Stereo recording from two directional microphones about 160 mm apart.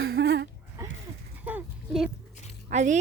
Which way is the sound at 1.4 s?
10° right (ahead or behind).